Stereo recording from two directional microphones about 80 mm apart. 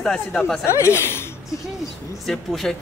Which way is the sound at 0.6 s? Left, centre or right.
Left.